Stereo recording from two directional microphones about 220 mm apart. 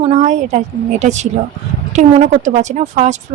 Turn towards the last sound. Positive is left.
turn(degrees=-30)  # may be behind; listen again after turning